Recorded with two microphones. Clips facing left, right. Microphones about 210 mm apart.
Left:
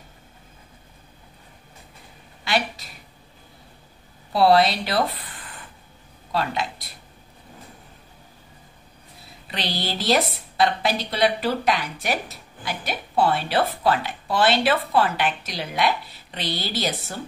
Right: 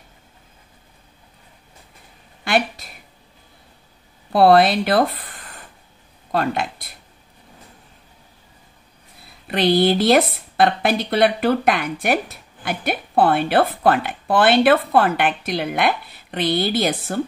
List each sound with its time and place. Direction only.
4.3 s speech: 55° right (ahead or behind)
9.5 s a woman's voice: 55° right (ahead or behind)